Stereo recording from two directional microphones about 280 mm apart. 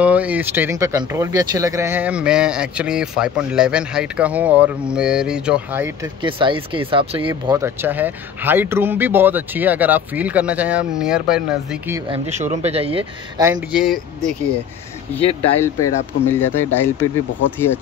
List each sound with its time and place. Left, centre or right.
0.0 s speech: centre
6.2 s speech: centre
12.1 s speech: right
13.5 s speech: centre
15.1 s speech: centre
16.1 s speech: centre